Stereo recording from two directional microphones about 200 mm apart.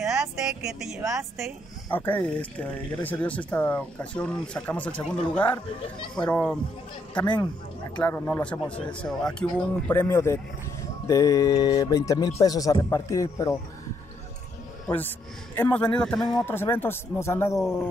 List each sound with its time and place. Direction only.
0.7 s speech: centre (ahead or behind)
1.9 s speech: 10° left (ahead or behind)
8.0 s speech: 10° left (ahead or behind)
14.9 s speech: 10° left (ahead or behind)